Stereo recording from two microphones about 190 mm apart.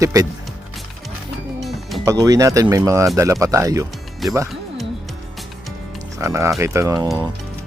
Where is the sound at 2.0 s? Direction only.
20° right (ahead or behind).